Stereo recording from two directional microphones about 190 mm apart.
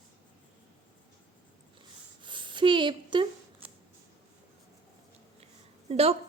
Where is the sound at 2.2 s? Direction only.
25° right (ahead or behind).